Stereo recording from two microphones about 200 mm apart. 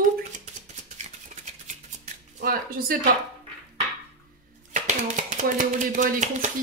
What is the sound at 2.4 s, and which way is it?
Speech, 45° right (ahead or behind).